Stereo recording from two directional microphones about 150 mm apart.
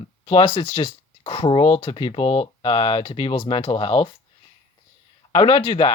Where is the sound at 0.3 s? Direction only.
40° left (ahead or behind).